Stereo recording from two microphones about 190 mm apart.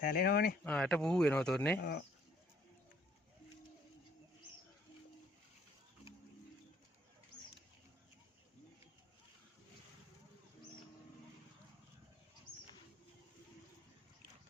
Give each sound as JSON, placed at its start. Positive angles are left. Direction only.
{"t": 0.0, "sound": "speech", "side_deg": 55}
{"t": 0.6, "sound": "speech", "side_deg": 5}
{"t": 1.8, "sound": "speech", "side_deg": 60}